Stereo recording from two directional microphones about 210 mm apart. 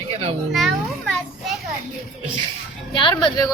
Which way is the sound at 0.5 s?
Centre (ahead or behind).